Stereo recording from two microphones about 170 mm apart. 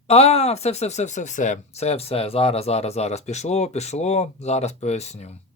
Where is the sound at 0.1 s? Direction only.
40° left (ahead or behind).